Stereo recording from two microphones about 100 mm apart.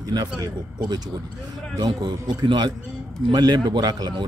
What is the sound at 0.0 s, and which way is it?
A man's voice, 45° right (ahead or behind).